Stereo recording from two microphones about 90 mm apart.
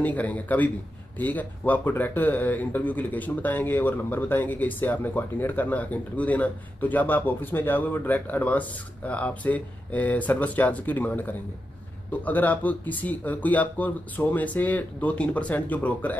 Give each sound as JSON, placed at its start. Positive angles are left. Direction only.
{"t": 0.0, "sound": "speech", "side_deg": 15}